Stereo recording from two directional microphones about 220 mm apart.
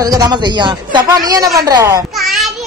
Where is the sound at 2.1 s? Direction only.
Centre (ahead or behind).